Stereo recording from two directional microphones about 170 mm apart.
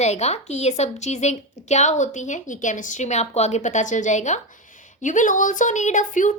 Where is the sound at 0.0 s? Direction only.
40° left (ahead or behind).